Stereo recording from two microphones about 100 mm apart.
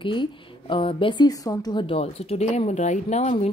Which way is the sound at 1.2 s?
40° left (ahead or behind).